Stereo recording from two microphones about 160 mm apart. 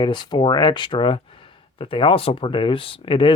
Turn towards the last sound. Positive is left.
turn(degrees=35)  # may be behind; listen again after turning